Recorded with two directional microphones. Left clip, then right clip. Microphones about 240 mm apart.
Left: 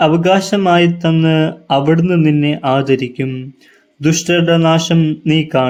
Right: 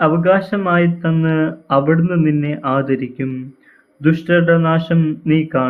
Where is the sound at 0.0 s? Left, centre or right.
Left.